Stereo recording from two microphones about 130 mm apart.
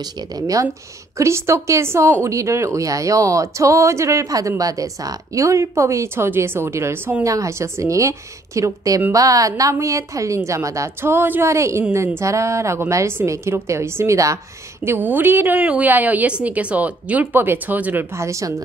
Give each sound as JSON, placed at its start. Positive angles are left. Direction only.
{"t": 0.0, "sound": "a woman's voice", "side_deg": -30}